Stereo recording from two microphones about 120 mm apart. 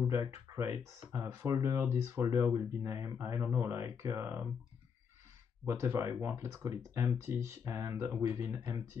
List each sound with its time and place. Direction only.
0.1 s speech: 25° right (ahead or behind)
5.7 s speech: 25° right (ahead or behind)